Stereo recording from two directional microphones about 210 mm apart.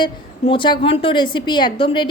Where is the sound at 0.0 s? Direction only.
25° left (ahead or behind).